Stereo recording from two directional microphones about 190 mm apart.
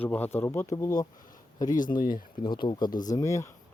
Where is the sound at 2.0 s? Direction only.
45° left (ahead or behind).